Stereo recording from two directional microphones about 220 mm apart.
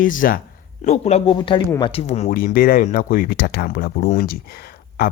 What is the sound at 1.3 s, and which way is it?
Speech, 20° left (ahead or behind).